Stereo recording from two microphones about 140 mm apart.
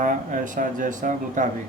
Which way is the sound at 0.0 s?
70° right (ahead or behind).